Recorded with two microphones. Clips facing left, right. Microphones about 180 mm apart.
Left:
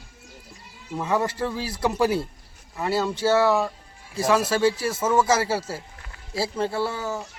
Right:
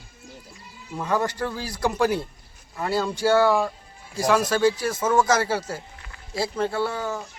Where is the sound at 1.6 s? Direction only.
25° left (ahead or behind).